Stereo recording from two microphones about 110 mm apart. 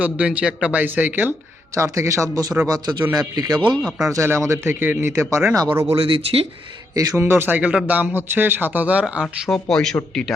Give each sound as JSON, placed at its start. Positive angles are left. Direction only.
{"t": 0.0, "sound": "a man's voice", "side_deg": -10}
{"t": 1.7, "sound": "a man's voice", "side_deg": -30}
{"t": 6.0, "sound": "speech", "side_deg": -55}
{"t": 6.9, "sound": "a man's voice", "side_deg": -30}
{"t": 9.2, "sound": "speech", "side_deg": 5}